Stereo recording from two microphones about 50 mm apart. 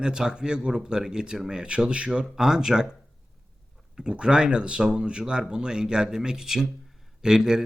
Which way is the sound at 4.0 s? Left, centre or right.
Centre.